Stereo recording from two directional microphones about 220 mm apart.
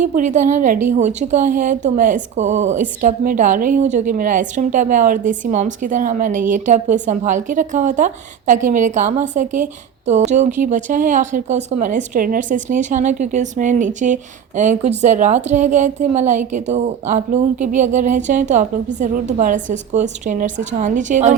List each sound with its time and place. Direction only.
0.0 s speech: 35° right (ahead or behind)